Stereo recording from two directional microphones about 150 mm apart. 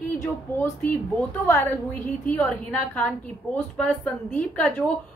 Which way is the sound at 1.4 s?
10° left (ahead or behind).